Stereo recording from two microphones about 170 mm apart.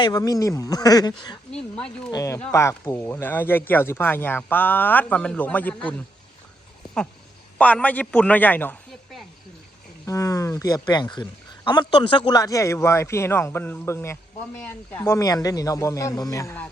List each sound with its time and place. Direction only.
0.0 s speech: 20° left (ahead or behind)
1.5 s speech: 5° left (ahead or behind)
2.0 s speech: 20° left (ahead or behind)
7.6 s speech: 10° left (ahead or behind)
10.1 s speech: 20° left (ahead or behind)